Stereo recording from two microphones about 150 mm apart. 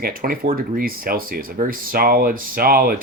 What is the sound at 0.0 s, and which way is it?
Speech, 75° right (ahead or behind).